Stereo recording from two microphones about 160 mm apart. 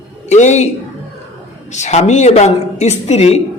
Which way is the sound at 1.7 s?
45° left (ahead or behind).